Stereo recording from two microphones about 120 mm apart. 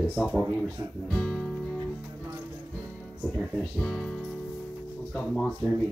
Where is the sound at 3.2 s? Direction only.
Centre (ahead or behind).